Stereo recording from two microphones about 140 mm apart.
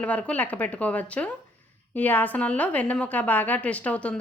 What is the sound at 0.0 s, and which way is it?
A woman's voice, 10° left (ahead or behind).